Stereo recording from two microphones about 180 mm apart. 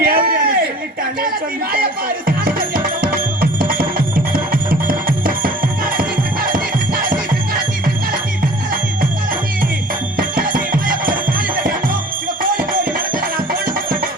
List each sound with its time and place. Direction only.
0.0 s a sound: 55° right (ahead or behind)
1.7 s music: 55° right (ahead or behind)
10.2 s music: 50° right (ahead or behind)